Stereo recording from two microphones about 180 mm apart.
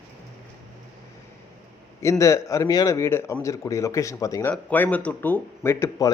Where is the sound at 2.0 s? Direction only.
15° left (ahead or behind).